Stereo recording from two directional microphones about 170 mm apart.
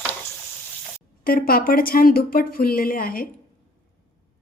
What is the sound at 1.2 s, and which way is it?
Speech, 60° left (ahead or behind).